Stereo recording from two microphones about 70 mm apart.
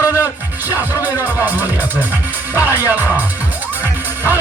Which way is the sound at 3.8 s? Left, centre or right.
Right.